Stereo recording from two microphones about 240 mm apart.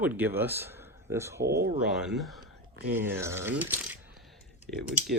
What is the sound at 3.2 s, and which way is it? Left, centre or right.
Speech, centre.